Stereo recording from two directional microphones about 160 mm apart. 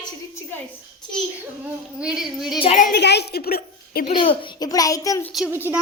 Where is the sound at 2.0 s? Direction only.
5° right (ahead or behind).